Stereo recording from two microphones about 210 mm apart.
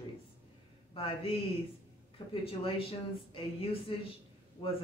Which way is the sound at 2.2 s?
25° left (ahead or behind).